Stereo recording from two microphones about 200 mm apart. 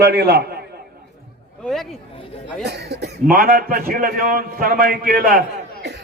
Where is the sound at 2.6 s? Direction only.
55° right (ahead or behind).